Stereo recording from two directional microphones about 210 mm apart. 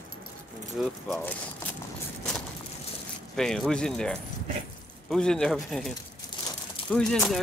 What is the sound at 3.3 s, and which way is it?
Speech, centre (ahead or behind).